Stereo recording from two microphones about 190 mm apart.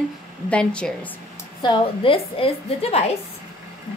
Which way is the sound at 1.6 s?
25° left (ahead or behind).